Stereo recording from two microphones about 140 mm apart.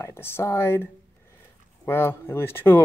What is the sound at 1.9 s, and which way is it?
Speech, 15° left (ahead or behind).